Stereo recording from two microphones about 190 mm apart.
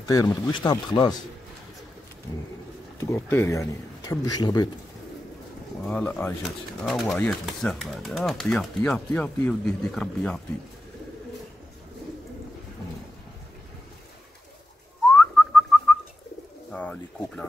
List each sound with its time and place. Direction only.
0.0 s speech: 15° left (ahead or behind)
3.0 s speech: 15° left (ahead or behind)
5.9 s speech: 10° left (ahead or behind)
15.0 s whistling: 5° left (ahead or behind)
16.7 s speech: 5° left (ahead or behind)